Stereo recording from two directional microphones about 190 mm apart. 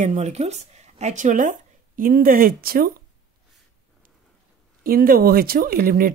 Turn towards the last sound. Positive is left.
turn(degrees=-50)  # may be behind; listen again after turning